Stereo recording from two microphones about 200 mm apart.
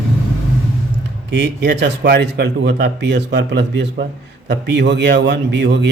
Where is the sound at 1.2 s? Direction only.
60° right (ahead or behind).